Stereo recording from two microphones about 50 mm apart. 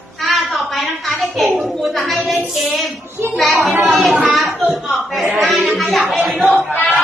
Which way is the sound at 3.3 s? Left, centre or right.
Centre.